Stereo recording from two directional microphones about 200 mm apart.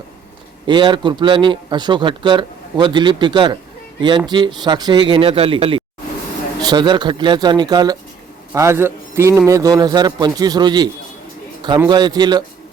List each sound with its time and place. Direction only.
0.7 s a man's voice: 25° right (ahead or behind)